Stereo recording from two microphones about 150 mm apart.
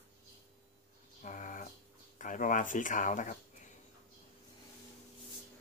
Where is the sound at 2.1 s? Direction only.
60° left (ahead or behind).